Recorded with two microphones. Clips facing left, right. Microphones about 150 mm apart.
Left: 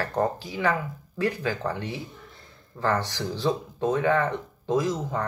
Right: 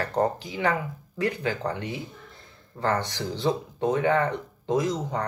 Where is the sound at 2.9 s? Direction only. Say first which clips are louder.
Even; 20° right (ahead or behind).